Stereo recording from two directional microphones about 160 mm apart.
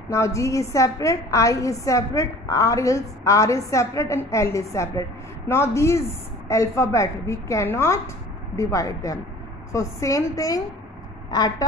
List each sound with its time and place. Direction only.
0.1 s a woman's voice: 20° left (ahead or behind)